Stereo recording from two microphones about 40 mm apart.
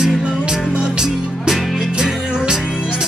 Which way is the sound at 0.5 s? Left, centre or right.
Right.